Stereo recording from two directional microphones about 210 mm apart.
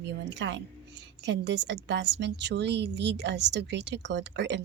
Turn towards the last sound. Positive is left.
turn(degrees=-55)  # may be behind; listen again after turning